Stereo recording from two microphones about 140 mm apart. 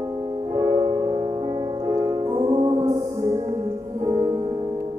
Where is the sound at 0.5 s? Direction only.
20° right (ahead or behind).